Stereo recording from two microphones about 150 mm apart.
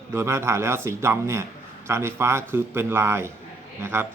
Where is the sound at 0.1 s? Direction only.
15° right (ahead or behind).